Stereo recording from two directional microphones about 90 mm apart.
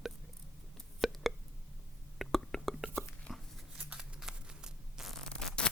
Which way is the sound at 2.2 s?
5° left (ahead or behind).